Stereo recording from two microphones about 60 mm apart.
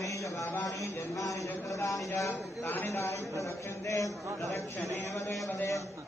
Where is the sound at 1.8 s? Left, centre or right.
Left.